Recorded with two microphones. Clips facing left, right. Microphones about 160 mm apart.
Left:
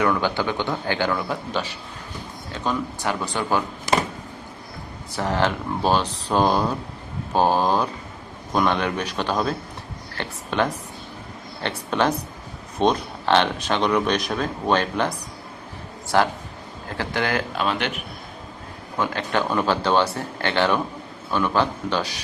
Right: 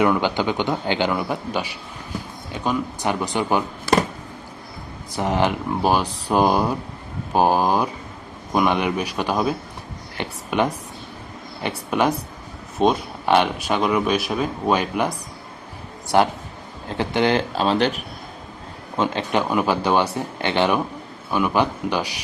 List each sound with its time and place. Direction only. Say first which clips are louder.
0.0 s speech: right 2 dB; 20° right (ahead or behind)
5.1 s speech: right 2 dB; 15° right (ahead or behind)
17.0 s speech: right 5 dB; 20° right (ahead or behind)
18.9 s speech: right 2 dB; 20° right (ahead or behind)